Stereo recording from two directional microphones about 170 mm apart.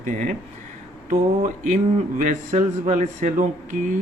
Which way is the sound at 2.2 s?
45° right (ahead or behind).